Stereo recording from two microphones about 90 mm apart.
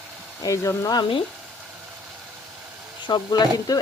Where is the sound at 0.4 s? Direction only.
35° left (ahead or behind).